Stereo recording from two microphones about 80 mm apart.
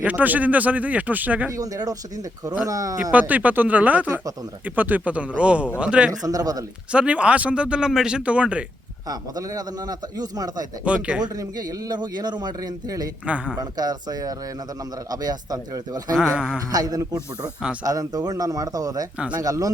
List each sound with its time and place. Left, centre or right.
0.0 s speech: centre
1.5 s a man's voice: right
3.1 s speech: centre
6.1 s a man's voice: right
6.9 s speech: centre
9.0 s a man's voice: right
10.8 s speech: centre
11.3 s a man's voice: right
13.2 s speech: centre
13.6 s a man's voice: right